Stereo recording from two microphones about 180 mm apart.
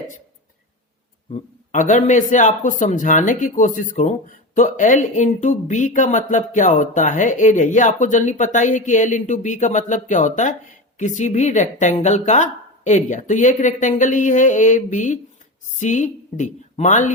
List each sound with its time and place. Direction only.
1.3 s speech: 45° left (ahead or behind)